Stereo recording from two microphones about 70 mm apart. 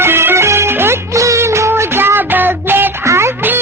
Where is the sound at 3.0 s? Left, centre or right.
Right.